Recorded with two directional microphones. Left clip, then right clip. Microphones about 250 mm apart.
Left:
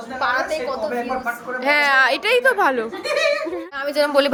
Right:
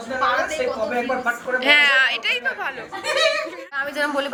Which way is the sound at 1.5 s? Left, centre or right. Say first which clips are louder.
Even; left.